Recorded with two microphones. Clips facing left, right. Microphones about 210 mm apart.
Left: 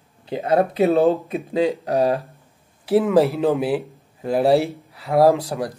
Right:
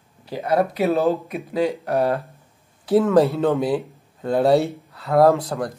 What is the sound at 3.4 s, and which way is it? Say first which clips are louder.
Speech: even; 15° left (ahead or behind).